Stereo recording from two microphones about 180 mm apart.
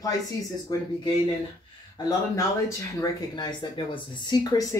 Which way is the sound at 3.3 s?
25° left (ahead or behind).